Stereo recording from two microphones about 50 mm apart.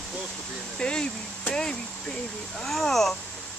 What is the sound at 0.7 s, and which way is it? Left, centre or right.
Speech, centre.